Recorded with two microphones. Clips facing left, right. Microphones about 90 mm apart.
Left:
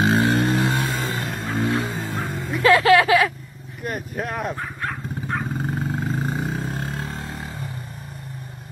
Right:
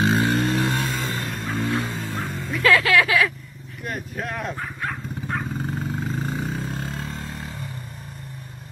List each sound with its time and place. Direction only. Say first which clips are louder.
0.0 s a sound: left 2 dB; 5° left (ahead or behind)
1.3 s music: left 2 dB; 10° left (ahead or behind)
2.5 s vehicle: left 4 dB; 30° left (ahead or behind)
3.8 s dog: left 2 dB; 5° left (ahead or behind)